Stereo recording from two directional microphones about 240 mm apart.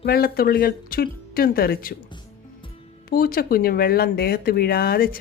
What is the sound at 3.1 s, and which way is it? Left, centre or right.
Speech, left.